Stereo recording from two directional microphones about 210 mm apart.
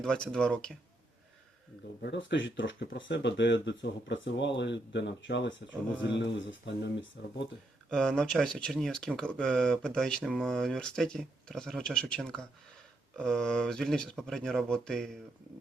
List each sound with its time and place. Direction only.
0.0 s speech: 5° left (ahead or behind)
2.0 s speech: 60° left (ahead or behind)
7.9 s speech: 5° left (ahead or behind)